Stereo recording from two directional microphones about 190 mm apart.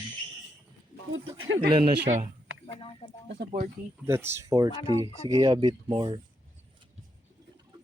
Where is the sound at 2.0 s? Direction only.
40° right (ahead or behind).